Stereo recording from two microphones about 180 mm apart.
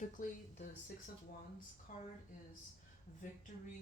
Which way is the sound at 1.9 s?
45° left (ahead or behind).